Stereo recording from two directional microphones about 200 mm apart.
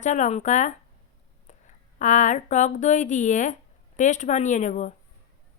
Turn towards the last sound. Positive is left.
turn(degrees=35)  # may be behind; listen again after turning